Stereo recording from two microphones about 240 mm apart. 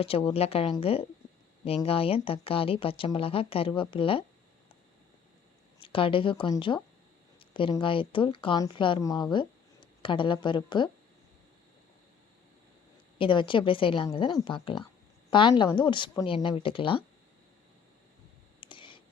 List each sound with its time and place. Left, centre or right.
0.0 s speech: left
5.8 s speech: left
13.1 s speech: left
18.6 s clicking: left